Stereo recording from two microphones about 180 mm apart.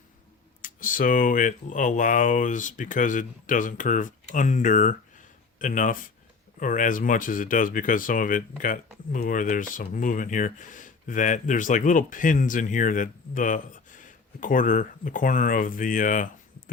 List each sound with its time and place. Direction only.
0.6 s speech: 50° left (ahead or behind)